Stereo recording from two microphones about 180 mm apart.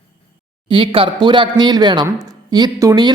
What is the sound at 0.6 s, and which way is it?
Speech, 30° right (ahead or behind).